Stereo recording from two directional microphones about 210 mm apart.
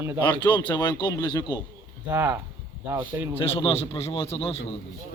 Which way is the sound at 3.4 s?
25° left (ahead or behind).